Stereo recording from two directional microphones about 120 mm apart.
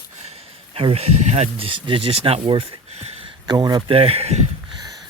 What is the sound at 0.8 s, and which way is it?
Speech, 55° right (ahead or behind).